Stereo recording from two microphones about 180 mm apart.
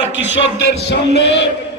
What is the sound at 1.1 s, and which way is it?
Speech, 75° left (ahead or behind).